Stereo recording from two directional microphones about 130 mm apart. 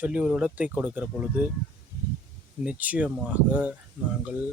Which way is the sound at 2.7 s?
10° right (ahead or behind).